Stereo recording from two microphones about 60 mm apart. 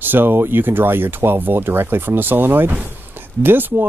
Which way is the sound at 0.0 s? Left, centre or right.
Right.